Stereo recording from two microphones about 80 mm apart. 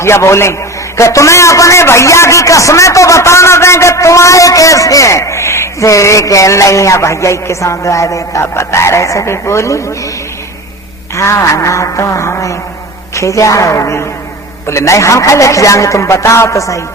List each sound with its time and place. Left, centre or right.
0.0 s a man's voice: left
11.2 s a man's voice: left